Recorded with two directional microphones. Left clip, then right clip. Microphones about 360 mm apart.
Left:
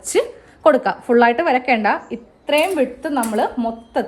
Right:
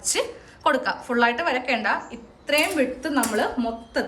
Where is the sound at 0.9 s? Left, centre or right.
Centre.